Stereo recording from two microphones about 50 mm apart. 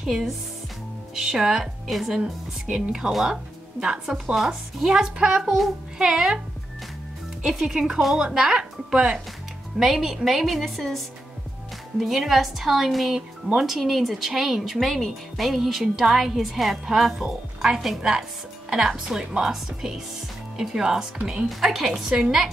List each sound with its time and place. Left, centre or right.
0.0 s speech: centre
2.1 s speech: centre
7.4 s speech: centre
9.8 s speech: centre